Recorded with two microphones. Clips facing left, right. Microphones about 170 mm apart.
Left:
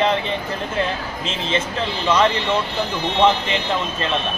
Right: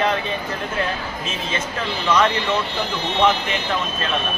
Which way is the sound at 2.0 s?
25° left (ahead or behind).